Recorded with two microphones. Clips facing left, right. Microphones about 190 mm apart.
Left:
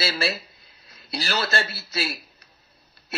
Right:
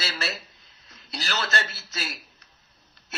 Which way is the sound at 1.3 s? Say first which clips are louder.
Left 3 dB; 35° left (ahead or behind).